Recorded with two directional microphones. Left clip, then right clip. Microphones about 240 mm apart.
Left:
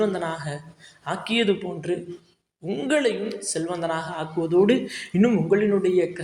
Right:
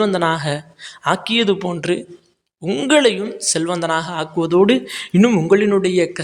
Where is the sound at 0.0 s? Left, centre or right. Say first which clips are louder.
Right 8 dB; right.